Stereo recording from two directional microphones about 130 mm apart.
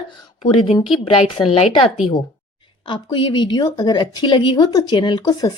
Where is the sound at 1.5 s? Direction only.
50° left (ahead or behind).